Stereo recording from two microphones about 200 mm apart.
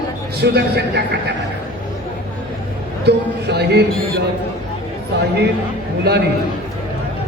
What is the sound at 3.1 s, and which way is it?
Speech, 55° right (ahead or behind).